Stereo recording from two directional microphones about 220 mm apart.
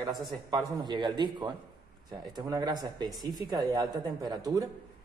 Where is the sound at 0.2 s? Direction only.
20° right (ahead or behind).